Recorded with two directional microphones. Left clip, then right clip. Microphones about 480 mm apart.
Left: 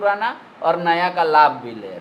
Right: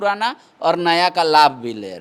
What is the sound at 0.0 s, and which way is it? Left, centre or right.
A man's voice, right.